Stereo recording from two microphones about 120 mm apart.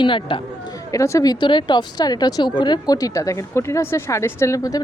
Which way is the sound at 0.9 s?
25° left (ahead or behind).